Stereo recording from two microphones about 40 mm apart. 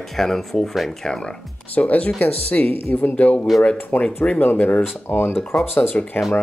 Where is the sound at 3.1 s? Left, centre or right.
Left.